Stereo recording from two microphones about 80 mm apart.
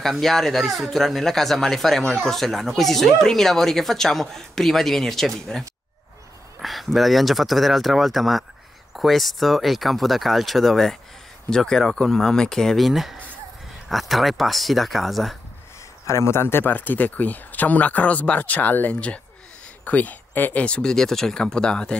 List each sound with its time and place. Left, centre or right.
0.2 s speech: centre
16.1 s speech: left; by 21.9 s centre